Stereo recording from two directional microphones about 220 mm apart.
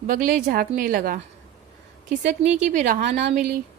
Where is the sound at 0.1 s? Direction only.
35° right (ahead or behind).